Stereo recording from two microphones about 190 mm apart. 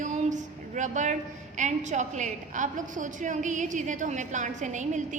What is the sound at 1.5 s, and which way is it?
A woman's voice, 40° right (ahead or behind).